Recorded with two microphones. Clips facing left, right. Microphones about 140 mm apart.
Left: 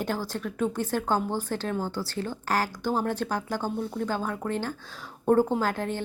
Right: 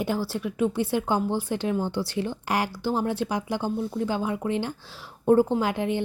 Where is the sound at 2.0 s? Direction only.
15° right (ahead or behind).